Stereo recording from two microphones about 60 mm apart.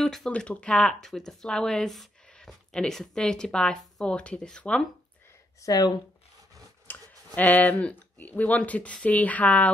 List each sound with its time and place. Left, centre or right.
0.0 s speech: centre
0.3 s speech: centre
5.6 s speech: left
6.9 s a sound: left
7.3 s speech: left